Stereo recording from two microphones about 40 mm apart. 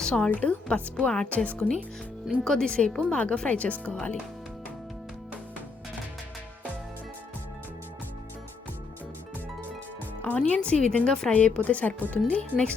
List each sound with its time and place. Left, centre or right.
0.0 s a woman's voice: left
0.3 s a woman's voice: left; by 2.7 s centre
2.7 s a woman's voice: left
10.3 s a woman's voice: left
12.3 s a woman's voice: left